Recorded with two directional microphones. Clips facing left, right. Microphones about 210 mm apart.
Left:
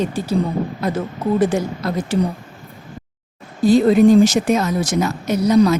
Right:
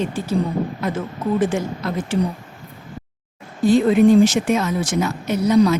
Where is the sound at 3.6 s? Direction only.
35° left (ahead or behind).